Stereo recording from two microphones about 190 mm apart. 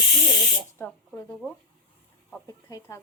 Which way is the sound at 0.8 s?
10° left (ahead or behind).